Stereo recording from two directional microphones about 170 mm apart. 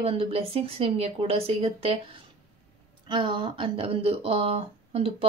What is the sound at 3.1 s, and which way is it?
Speech, 25° right (ahead or behind).